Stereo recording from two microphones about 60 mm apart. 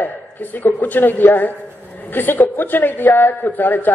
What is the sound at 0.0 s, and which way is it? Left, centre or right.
A man's voice, left.